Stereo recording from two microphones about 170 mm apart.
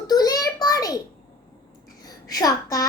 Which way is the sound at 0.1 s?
20° left (ahead or behind).